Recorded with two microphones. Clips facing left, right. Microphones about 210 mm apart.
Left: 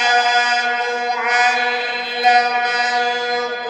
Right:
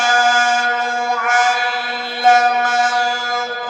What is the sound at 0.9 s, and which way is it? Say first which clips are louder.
Music: even; 20° left (ahead or behind).